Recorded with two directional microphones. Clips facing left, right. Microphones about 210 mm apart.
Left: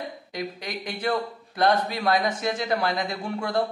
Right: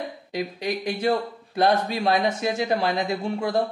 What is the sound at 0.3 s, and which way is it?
Speech, 25° right (ahead or behind).